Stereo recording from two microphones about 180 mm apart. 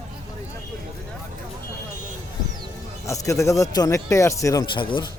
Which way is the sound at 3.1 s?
15° left (ahead or behind).